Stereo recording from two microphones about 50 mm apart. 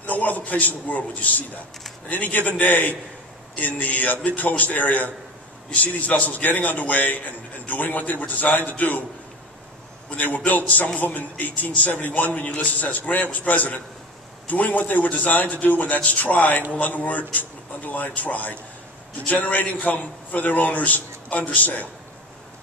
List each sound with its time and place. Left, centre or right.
0.0 s a man's voice: left
10.0 s a man's voice: left